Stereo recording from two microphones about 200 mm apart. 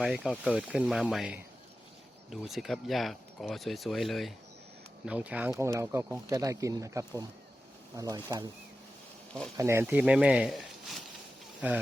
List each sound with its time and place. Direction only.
0.0 s speech: centre (ahead or behind); by 8.4 s 20° right (ahead or behind)
9.6 s speech: 15° right (ahead or behind)